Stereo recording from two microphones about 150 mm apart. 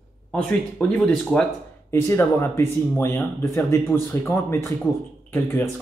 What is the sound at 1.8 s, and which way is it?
A man's voice, 15° left (ahead or behind).